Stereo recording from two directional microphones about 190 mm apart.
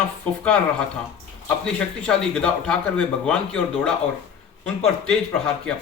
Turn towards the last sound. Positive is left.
turn(degrees=5)  # may be behind; listen again after turning